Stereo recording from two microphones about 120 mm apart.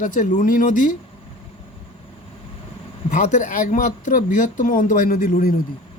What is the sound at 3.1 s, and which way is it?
Speech, 90° left.